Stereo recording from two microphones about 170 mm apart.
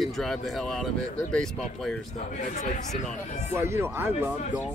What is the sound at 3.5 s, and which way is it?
Speech, 15° right (ahead or behind).